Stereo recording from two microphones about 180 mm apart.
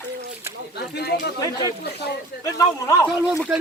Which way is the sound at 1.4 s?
20° left (ahead or behind).